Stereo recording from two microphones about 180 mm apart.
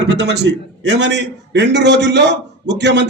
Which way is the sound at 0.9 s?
75° right (ahead or behind).